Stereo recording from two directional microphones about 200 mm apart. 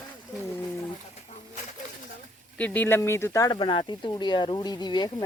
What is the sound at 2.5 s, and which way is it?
Speech, 10° left (ahead or behind).